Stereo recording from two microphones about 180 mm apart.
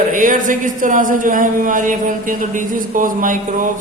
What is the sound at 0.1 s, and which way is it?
A man's voice, 45° right (ahead or behind).